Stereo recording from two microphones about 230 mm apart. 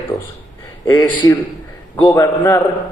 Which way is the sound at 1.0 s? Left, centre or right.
Centre.